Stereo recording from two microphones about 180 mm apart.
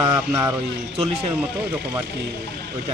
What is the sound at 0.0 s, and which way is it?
Speech, 20° right (ahead or behind).